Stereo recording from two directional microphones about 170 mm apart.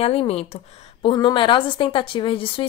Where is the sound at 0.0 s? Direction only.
35° left (ahead or behind).